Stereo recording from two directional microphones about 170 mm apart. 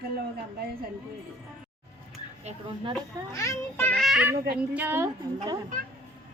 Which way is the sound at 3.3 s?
20° left (ahead or behind).